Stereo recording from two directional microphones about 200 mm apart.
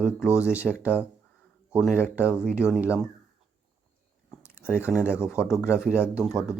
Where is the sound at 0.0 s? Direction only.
5° right (ahead or behind).